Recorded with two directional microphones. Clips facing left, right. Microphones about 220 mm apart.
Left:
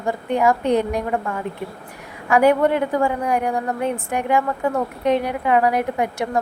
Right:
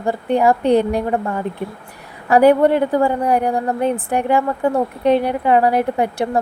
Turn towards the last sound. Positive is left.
turn(degrees=-30)  # may be behind; listen again after turning